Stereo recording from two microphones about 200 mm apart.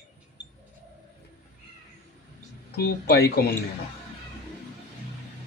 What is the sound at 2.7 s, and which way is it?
Speech, 55° left (ahead or behind).